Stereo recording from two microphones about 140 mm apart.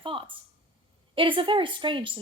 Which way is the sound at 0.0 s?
40° right (ahead or behind).